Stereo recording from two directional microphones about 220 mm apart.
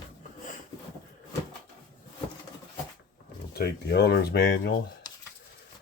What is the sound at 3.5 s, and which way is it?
Speech, 45° left (ahead or behind).